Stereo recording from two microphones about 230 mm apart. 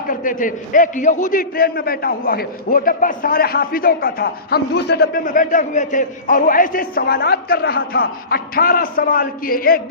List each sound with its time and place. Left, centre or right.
0.1 s a man's voice: left